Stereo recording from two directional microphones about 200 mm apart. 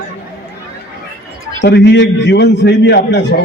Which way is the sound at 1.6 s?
60° left (ahead or behind).